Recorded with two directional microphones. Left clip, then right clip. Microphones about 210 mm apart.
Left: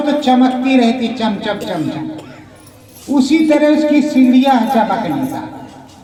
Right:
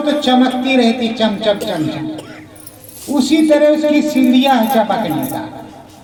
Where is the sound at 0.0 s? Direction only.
45° right (ahead or behind).